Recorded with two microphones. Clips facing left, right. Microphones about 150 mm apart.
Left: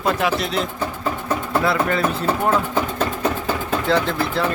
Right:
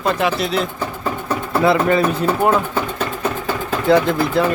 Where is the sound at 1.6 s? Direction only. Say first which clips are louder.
Right 7 dB; 20° right (ahead or behind).